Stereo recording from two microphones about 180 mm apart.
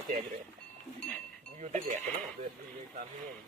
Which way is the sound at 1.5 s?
40° right (ahead or behind).